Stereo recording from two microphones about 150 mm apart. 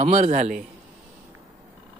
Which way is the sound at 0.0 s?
45° right (ahead or behind).